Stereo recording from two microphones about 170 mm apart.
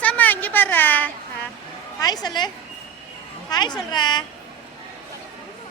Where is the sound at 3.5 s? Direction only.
25° left (ahead or behind).